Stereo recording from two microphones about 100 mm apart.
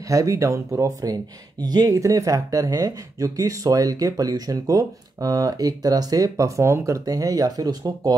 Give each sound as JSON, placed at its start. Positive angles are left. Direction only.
{"t": 0.1, "sound": "speech", "side_deg": -30}